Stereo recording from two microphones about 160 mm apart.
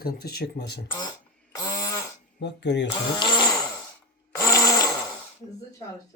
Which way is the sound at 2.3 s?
90° left.